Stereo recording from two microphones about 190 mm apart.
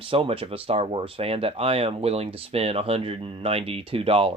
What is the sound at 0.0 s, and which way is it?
Speech, 30° right (ahead or behind).